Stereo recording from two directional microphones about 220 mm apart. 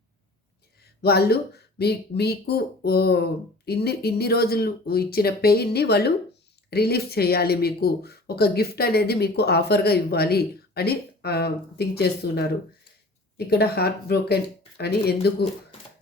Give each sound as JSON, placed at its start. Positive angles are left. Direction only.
{"t": 1.0, "sound": "speech", "side_deg": 45}